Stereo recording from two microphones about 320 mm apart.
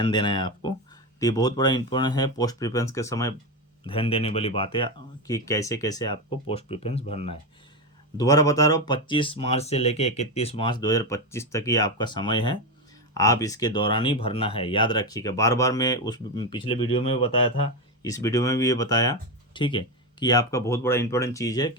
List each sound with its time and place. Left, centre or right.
0.0 s speech: centre